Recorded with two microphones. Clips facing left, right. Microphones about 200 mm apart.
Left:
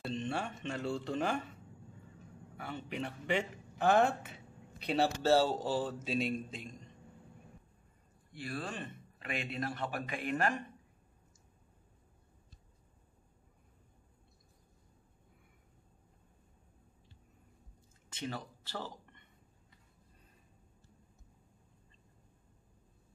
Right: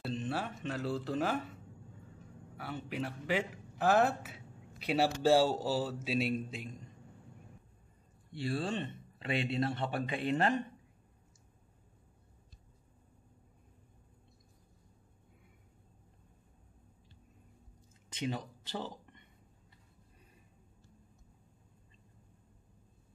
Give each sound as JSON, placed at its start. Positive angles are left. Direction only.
{"t": 0.0, "sound": "speech", "side_deg": -5}
{"t": 2.5, "sound": "a man's voice", "side_deg": -5}
{"t": 8.3, "sound": "speech", "side_deg": -30}
{"t": 18.1, "sound": "a sound", "side_deg": -15}